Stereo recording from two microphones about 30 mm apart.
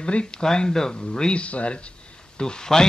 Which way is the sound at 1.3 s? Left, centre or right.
Left.